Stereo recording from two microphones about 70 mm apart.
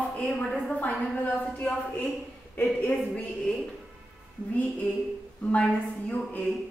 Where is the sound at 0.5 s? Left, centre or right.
Centre.